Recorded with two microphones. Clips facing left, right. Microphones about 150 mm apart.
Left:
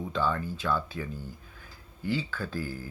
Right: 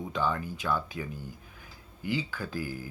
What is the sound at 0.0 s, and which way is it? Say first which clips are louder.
Speech: left 1 dB; 15° right (ahead or behind).